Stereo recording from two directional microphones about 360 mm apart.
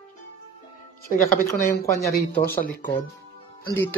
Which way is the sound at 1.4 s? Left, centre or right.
Centre.